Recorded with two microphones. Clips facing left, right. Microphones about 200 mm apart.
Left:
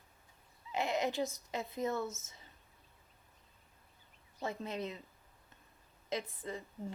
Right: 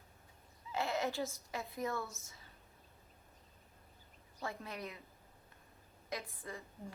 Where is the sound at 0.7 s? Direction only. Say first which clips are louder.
Left 2 dB; 15° left (ahead or behind).